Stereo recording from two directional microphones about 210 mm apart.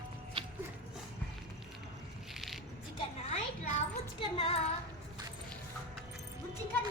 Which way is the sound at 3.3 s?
30° left (ahead or behind).